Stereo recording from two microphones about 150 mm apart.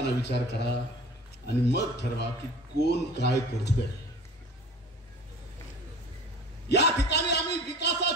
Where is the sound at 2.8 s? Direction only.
90° left.